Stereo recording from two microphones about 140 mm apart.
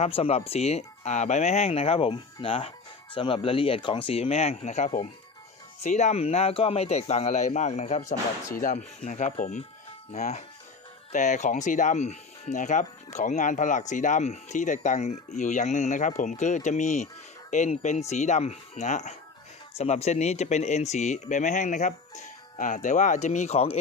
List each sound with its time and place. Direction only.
0.0 s speech: 45° left (ahead or behind)